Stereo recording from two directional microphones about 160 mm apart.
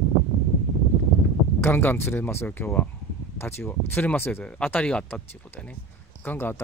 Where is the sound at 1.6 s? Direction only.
15° left (ahead or behind).